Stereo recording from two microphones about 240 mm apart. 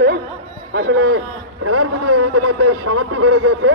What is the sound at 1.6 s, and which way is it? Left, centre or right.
A man's voice, right.